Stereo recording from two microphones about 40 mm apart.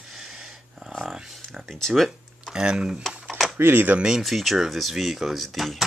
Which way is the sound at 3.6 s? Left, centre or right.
Right.